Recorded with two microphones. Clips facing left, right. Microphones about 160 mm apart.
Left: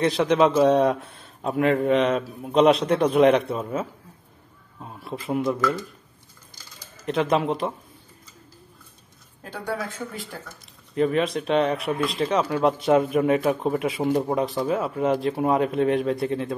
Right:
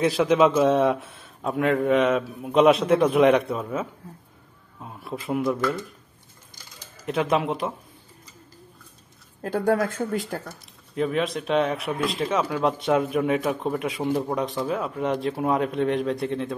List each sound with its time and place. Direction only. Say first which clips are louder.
0.0 s a man's voice: even; 5° right (ahead or behind)
7.1 s speech: left 1 dB; centre (ahead or behind)
9.4 s speech: right 8 dB; 50° right (ahead or behind)
10.3 s speech: right 7 dB; 60° right (ahead or behind)
11.0 s speech: left 3 dB; centre (ahead or behind)